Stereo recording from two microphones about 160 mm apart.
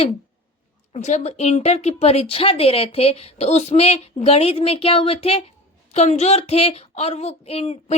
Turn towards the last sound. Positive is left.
turn(degrees=40)  # may be behind; listen again after turning